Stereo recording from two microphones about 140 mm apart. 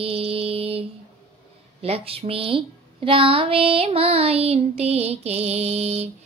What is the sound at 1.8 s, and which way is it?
Speech, 45° right (ahead or behind).